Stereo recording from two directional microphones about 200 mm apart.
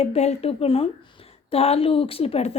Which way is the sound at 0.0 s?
35° left (ahead or behind).